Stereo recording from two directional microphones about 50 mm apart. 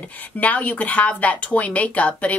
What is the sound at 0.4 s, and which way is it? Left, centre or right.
Speech, left.